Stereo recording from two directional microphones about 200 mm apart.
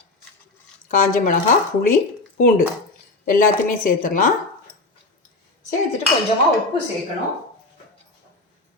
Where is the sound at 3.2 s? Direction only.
45° left (ahead or behind).